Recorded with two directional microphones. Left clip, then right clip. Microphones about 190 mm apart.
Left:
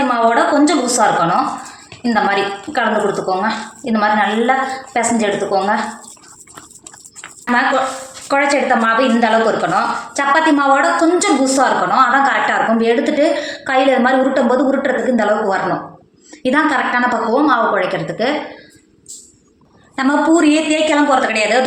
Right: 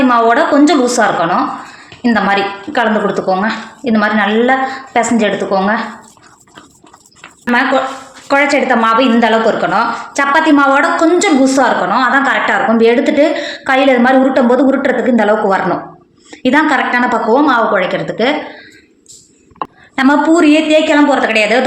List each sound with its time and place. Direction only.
0.1 s a woman's voice: 50° right (ahead or behind)
8.3 s a woman's voice: 50° right (ahead or behind)
20.0 s a woman's voice: 50° right (ahead or behind)